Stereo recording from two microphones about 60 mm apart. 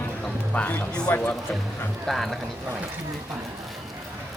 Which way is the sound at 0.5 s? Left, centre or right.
Left.